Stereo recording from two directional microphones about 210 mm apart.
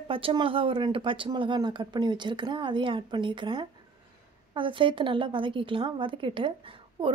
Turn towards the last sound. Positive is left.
turn(degrees=-25)  # may be behind; listen again after turning